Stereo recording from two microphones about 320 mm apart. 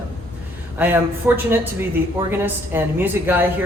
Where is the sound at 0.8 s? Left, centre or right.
Centre.